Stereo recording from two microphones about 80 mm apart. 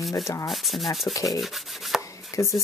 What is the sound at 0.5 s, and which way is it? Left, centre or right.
Sanding, centre.